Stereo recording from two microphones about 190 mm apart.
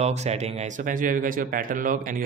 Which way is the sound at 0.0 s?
35° right (ahead or behind).